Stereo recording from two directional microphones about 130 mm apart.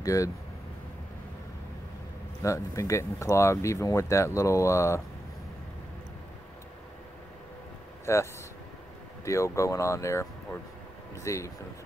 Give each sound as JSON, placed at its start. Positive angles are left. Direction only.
{"t": 0.0, "sound": "speech", "side_deg": 25}
{"t": 2.4, "sound": "speech", "side_deg": 25}
{"t": 8.0, "sound": "speech", "side_deg": 20}